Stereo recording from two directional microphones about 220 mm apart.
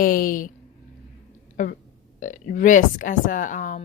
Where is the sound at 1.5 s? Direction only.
35° left (ahead or behind).